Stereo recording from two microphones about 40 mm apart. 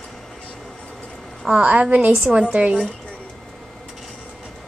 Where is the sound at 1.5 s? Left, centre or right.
Right.